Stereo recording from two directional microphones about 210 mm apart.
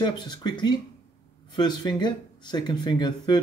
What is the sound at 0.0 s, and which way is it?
Speech, 20° left (ahead or behind).